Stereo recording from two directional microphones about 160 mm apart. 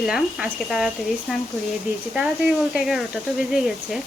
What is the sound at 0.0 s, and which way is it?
Speech, 5° right (ahead or behind).